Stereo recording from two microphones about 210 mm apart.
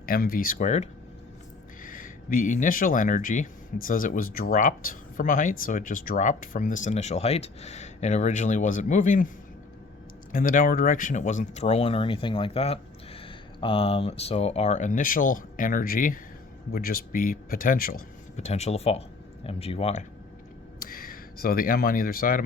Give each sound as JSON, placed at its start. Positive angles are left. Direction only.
{"t": 0.0, "sound": "speech", "side_deg": 45}
{"t": 10.3, "sound": "speech", "side_deg": 40}
{"t": 20.7, "sound": "speech", "side_deg": 45}